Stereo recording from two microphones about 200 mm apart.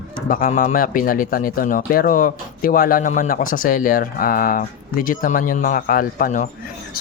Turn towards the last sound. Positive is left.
turn(degrees=40)  # may be behind; listen again after turning